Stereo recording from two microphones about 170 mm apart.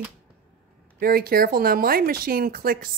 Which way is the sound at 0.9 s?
60° right (ahead or behind).